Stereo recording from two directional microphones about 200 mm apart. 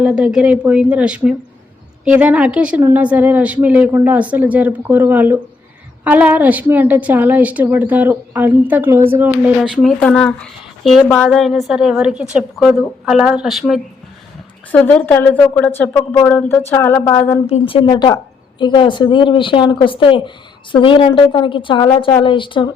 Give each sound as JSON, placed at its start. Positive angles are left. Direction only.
{"t": 0.0, "sound": "a woman's voice", "side_deg": -5}
{"t": 17.4, "sound": "a woman's voice", "side_deg": 30}